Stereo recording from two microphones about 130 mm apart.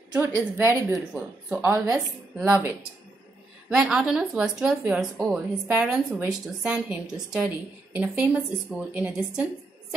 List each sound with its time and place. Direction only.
0.1 s a woman's voice: 15° right (ahead or behind)
2.4 s a woman's voice: 10° right (ahead or behind)
3.7 s a woman's voice: 5° right (ahead or behind)
4.8 s a woman's voice: 15° right (ahead or behind)
5.2 s a woman's voice: 5° right (ahead or behind)